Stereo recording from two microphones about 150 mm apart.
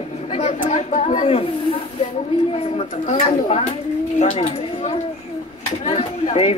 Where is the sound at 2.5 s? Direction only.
40° left (ahead or behind).